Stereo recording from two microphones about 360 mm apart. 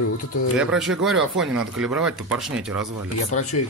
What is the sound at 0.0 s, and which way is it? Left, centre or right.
Speech, left.